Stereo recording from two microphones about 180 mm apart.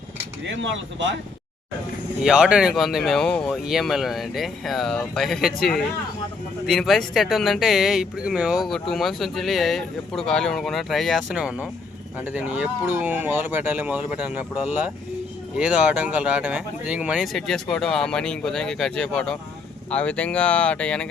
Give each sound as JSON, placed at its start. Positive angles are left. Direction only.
{"t": 0.5, "sound": "speech", "side_deg": -90}
{"t": 2.2, "sound": "speech", "side_deg": -5}